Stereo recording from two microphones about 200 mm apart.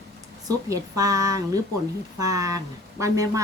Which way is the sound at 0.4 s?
15° right (ahead or behind).